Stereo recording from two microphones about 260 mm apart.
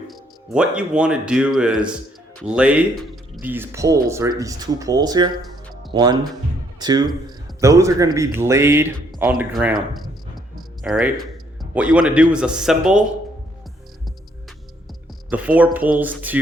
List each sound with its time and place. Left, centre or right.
0.1 s speech: centre
9.9 s a sound: centre
11.7 s speech: centre
15.3 s speech: centre